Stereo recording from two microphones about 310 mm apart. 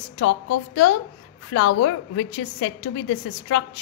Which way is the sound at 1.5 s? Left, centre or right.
Left.